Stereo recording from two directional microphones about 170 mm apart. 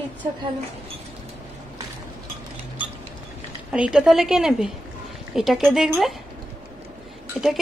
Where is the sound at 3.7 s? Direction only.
5° right (ahead or behind).